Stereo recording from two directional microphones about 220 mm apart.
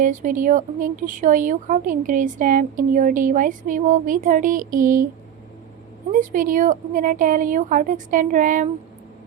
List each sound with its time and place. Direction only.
0.0 s a woman's voice: 35° right (ahead or behind)
6.1 s a woman's voice: 35° right (ahead or behind)